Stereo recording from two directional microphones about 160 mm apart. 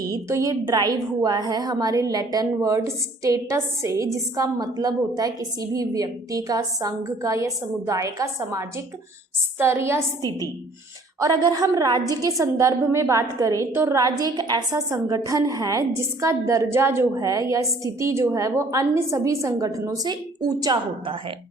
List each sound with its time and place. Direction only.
0.0 s a woman's voice: 20° right (ahead or behind)